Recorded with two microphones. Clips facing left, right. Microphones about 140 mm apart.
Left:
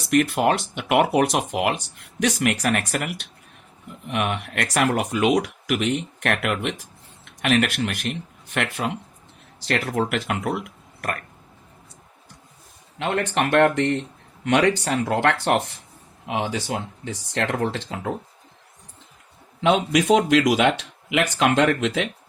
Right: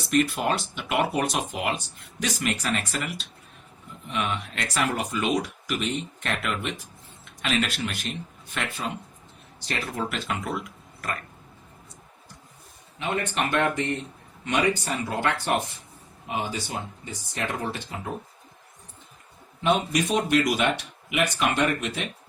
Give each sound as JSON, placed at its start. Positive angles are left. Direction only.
{"t": 0.1, "sound": "speech", "side_deg": 65}
{"t": 9.6, "sound": "speech", "side_deg": 80}
{"t": 13.0, "sound": "speech", "side_deg": 70}
{"t": 19.6, "sound": "speech", "side_deg": 90}